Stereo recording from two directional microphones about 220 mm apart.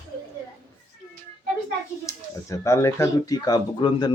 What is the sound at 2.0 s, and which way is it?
Speech, 15° left (ahead or behind).